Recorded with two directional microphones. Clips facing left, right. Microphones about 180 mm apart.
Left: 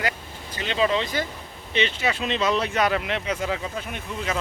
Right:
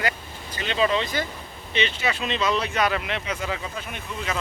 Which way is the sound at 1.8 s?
45° left (ahead or behind).